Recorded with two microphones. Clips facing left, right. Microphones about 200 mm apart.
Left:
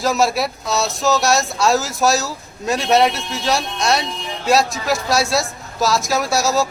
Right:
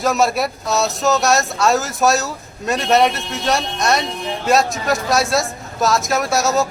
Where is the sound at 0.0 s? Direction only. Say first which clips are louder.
Right 1 dB; centre (ahead or behind).